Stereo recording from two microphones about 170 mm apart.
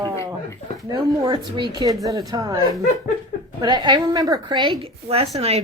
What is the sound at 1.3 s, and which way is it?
A woman's voice, 30° right (ahead or behind).